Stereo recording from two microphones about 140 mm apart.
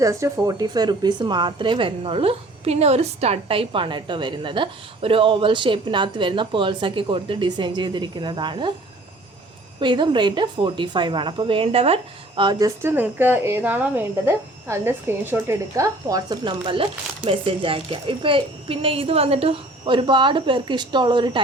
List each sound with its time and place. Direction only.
0.0 s a woman's voice: 20° right (ahead or behind)
9.8 s a woman's voice: 35° right (ahead or behind)
12.4 s a woman's voice: 30° right (ahead or behind)